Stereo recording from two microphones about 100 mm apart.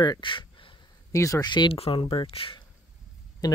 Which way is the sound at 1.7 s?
75° left (ahead or behind).